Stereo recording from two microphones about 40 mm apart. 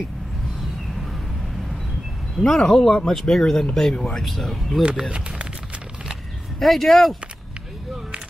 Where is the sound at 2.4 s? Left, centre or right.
Centre.